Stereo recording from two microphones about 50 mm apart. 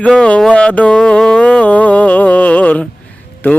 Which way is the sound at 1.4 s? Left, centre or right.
Left.